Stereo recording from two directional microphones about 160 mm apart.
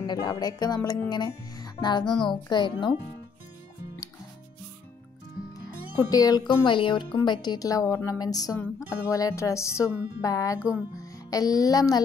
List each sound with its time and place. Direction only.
0.0 s speech: 25° left (ahead or behind)
2.0 s music: centre (ahead or behind)
2.5 s speech: 30° left (ahead or behind)
6.0 s speech: 25° left (ahead or behind)
10.6 s speech: 10° right (ahead or behind)
11.0 s music: 20° left (ahead or behind)